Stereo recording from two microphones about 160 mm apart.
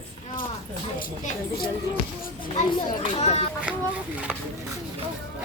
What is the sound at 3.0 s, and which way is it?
Speech, 40° left (ahead or behind).